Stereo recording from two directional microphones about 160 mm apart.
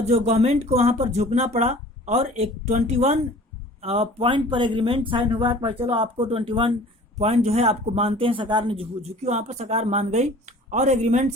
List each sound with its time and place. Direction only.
0.0 s speech: 40° right (ahead or behind)